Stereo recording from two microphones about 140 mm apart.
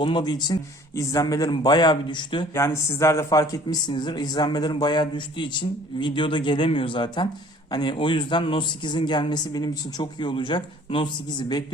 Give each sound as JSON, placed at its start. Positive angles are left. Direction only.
{"t": 0.0, "sound": "a man's voice", "side_deg": 35}
{"t": 2.6, "sound": "a man's voice", "side_deg": 20}